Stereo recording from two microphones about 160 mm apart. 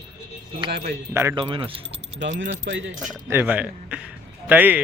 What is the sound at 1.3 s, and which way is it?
Speech, 30° right (ahead or behind).